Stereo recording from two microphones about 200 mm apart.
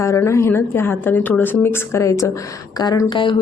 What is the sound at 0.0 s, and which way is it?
Speech, 15° left (ahead or behind).